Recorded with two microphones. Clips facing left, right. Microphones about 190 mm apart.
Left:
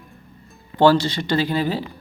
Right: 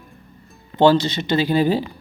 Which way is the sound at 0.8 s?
20° right (ahead or behind).